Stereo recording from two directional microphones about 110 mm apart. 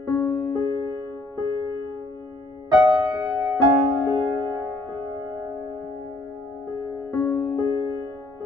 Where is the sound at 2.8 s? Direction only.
35° right (ahead or behind).